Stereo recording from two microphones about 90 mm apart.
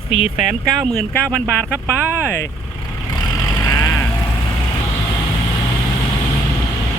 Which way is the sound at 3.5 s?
35° left (ahead or behind).